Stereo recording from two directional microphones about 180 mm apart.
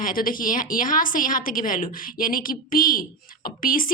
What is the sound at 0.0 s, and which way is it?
A woman's voice, 50° left (ahead or behind).